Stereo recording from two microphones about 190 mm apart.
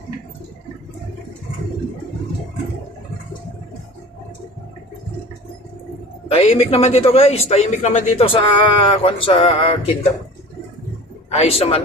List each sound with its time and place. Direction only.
6.3 s a man's voice: 30° left (ahead or behind)
11.3 s a man's voice: 30° left (ahead or behind)